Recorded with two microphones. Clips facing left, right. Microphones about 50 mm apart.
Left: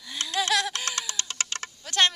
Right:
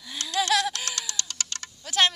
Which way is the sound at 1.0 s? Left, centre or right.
Left.